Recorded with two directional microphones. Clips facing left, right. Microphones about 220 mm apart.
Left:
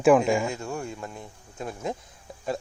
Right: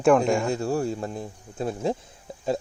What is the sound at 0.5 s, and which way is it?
A man's voice, 35° right (ahead or behind).